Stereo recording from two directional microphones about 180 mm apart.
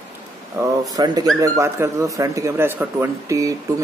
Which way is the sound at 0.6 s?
20° right (ahead or behind).